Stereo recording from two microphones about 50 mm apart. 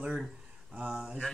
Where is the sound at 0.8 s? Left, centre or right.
Centre.